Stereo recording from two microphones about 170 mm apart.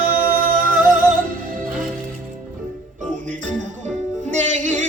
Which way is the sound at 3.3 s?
45° right (ahead or behind).